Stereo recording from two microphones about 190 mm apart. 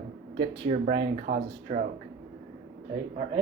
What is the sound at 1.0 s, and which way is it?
Speech, 60° right (ahead or behind).